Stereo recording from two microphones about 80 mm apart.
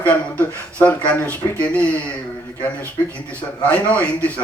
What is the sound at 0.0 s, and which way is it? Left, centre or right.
Speech, centre.